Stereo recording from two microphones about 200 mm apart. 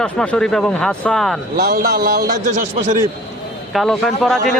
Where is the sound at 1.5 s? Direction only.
50° right (ahead or behind).